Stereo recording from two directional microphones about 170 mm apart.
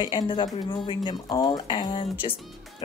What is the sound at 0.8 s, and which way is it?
Speech, 30° left (ahead or behind).